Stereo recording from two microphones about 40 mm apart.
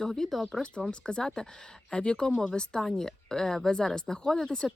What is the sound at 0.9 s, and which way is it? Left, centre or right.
Speech, left.